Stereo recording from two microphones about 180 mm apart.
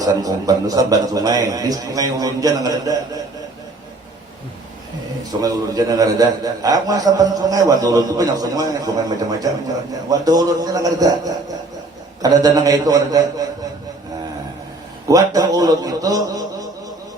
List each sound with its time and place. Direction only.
0.0 s a man's voice: 20° right (ahead or behind)
5.4 s a man's voice: 20° right (ahead or behind)
15.0 s a man's voice: 20° right (ahead or behind)